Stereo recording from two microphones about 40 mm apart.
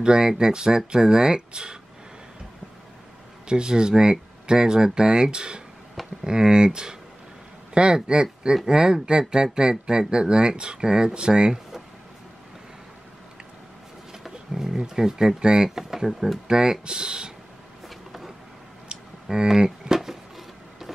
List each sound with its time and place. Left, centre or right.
0.0 s speech: centre
3.4 s speech: right
14.5 s speech: centre
17.8 s a sound: centre
19.3 s speech: centre
20.0 s a sound: centre